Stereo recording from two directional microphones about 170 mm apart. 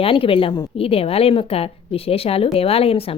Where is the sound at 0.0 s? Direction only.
30° left (ahead or behind).